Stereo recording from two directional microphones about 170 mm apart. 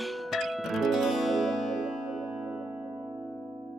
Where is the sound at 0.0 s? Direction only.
Centre (ahead or behind).